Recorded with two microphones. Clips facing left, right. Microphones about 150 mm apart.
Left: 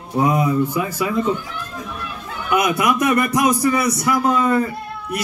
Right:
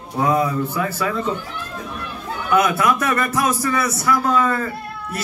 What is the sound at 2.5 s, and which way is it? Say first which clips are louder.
A man's voice: right 1 dB; 15° left (ahead or behind).